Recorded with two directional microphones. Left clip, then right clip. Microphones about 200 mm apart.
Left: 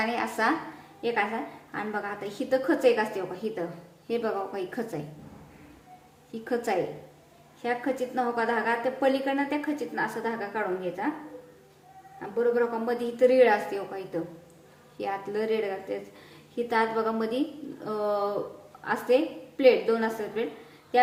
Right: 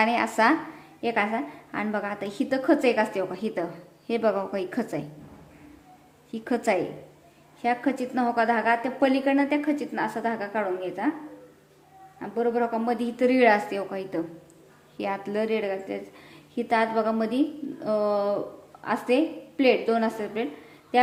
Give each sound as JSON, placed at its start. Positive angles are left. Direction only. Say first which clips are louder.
{"t": 0.0, "sound": "a woman's voice", "louder": "right 5 dB", "side_deg": -45}
{"t": 6.3, "sound": "a woman's voice", "louder": "right 3 dB", "side_deg": -45}
{"t": 12.4, "sound": "a woman's voice", "louder": "even", "side_deg": -45}